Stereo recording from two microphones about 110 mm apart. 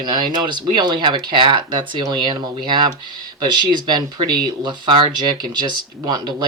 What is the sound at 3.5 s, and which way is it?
Speech, 40° right (ahead or behind).